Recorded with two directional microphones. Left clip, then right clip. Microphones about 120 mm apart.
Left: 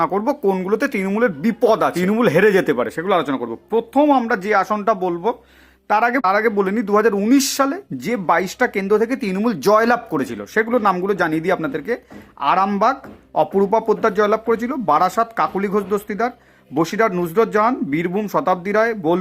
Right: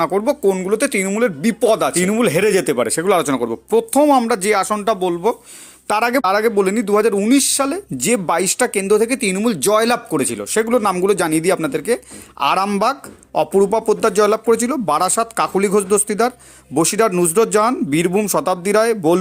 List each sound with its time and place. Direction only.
0.0 s speech: 20° right (ahead or behind)
2.7 s speech: 40° right (ahead or behind)
4.7 s speech: 25° right (ahead or behind)
5.9 s speech: 45° right (ahead or behind); by 7.8 s 25° right (ahead or behind)
7.9 s speech: 45° right (ahead or behind)
12.4 s speech: 50° right (ahead or behind)